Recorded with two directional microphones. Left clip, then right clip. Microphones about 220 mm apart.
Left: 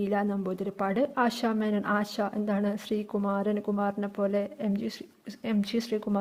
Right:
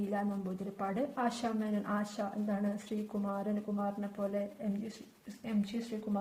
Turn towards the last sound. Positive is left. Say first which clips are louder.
# left 9 dB
turn(degrees=45)  # may be behind; listen again after turning